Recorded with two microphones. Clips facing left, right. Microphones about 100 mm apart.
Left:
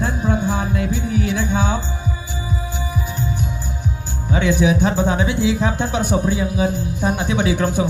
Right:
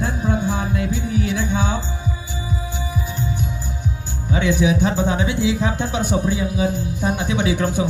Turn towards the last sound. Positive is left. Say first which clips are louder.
# left 1 dB
turn(degrees=50)  # may be behind; listen again after turning